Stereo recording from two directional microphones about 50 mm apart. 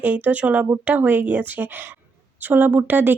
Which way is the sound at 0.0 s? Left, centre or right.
Right.